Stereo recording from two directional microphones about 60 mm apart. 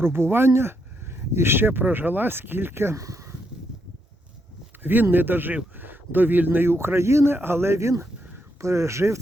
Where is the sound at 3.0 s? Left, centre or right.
Right.